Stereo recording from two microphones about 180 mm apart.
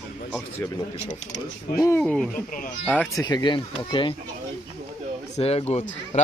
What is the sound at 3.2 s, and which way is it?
Speech, 20° left (ahead or behind).